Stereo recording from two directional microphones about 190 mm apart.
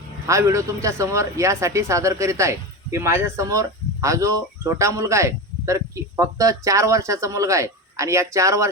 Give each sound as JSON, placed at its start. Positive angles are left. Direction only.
{"t": 0.3, "sound": "speech", "side_deg": -15}